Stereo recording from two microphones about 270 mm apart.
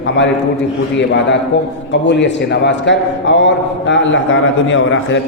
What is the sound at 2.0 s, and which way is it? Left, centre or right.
A man's voice, left.